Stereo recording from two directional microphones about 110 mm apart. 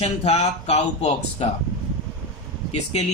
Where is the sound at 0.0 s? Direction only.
70° left (ahead or behind).